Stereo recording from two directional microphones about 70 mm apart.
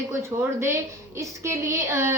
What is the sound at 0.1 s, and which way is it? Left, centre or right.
A woman's voice, right.